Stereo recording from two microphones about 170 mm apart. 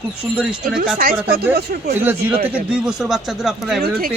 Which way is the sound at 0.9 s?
60° right (ahead or behind).